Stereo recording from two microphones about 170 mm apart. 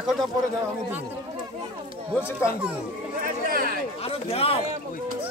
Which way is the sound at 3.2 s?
55° right (ahead or behind).